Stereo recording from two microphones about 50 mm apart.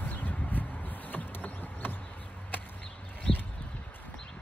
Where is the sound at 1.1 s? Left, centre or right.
Left.